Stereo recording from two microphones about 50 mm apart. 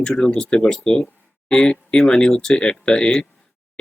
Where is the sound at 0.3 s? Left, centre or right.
Centre.